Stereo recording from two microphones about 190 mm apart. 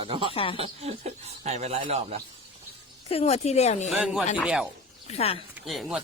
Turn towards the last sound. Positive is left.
turn(degrees=0)  # may be behind; listen again after turning